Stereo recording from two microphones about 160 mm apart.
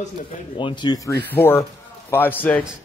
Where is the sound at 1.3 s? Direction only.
15° left (ahead or behind).